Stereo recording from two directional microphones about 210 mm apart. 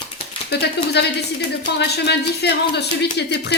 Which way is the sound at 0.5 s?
50° left (ahead or behind).